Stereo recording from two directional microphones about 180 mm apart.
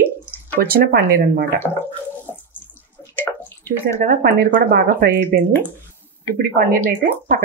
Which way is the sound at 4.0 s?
55° right (ahead or behind).